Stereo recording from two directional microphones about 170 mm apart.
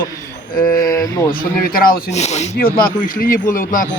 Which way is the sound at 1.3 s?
60° left (ahead or behind).